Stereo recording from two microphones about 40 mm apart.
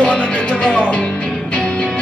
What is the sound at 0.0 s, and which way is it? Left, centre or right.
Music, left.